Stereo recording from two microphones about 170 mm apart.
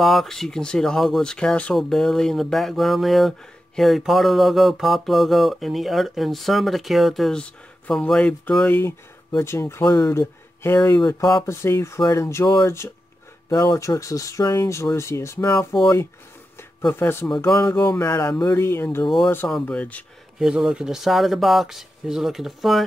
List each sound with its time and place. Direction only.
0.0 s speech: centre (ahead or behind)
19.0 s speech: centre (ahead or behind)
20.3 s speech: 5° right (ahead or behind)